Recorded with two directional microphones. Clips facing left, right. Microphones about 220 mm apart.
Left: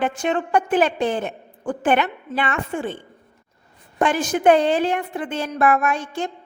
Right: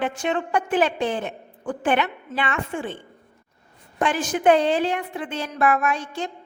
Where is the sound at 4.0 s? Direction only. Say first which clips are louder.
Left 3 dB; 45° left (ahead or behind).